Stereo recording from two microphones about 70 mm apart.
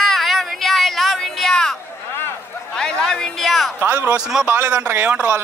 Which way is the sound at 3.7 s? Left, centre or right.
Right.